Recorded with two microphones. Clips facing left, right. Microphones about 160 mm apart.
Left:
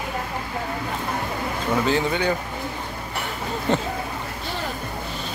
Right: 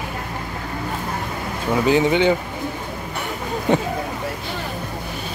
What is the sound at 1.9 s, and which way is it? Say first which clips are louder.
Speech: right 9 dB; 20° right (ahead or behind).